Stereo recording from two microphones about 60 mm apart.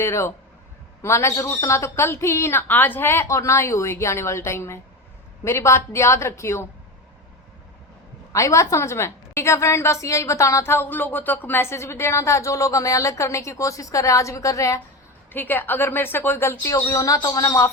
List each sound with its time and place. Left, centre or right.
0.0 s a woman's voice: left
3.2 s a woman's voice: left
8.3 s a woman's voice: left
15.3 s a woman's voice: left
16.7 s speech: left